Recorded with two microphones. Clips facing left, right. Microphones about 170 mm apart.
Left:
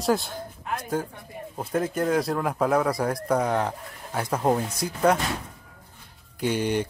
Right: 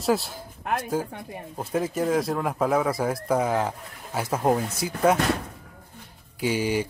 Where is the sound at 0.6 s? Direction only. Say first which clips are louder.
Right 5 dB; 65° right (ahead or behind).